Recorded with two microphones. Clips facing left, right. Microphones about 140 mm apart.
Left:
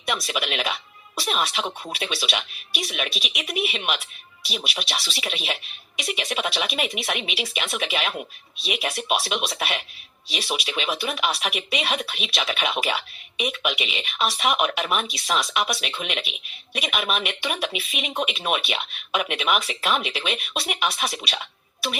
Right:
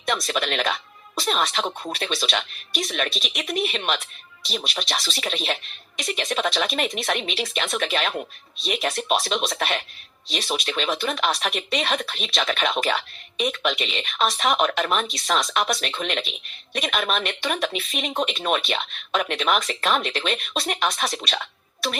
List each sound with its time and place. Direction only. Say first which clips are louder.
0.0 s speech: right 2 dB; 10° left (ahead or behind)
4.9 s speech: right 2 dB; 40° right (ahead or behind)
5.2 s speech: right 3 dB; 10° left (ahead or behind)